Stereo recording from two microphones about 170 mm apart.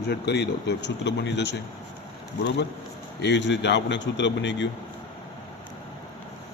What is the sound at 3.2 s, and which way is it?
Speech, 90° left.